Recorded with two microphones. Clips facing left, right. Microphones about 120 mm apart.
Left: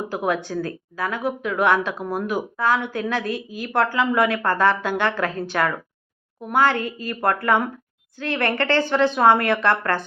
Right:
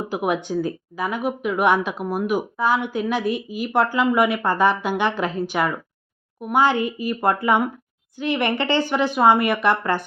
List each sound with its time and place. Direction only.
0.1 s speech: 15° right (ahead or behind)